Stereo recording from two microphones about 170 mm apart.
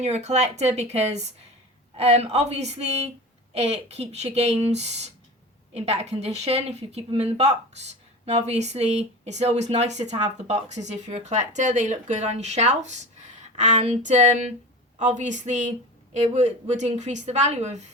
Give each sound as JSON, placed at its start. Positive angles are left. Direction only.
{"t": 0.0, "sound": "a woman's voice", "side_deg": -40}